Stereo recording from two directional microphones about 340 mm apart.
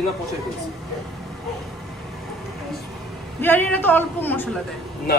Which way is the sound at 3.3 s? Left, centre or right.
Centre.